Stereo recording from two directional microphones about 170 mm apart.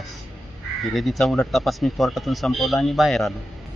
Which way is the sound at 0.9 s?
5° left (ahead or behind).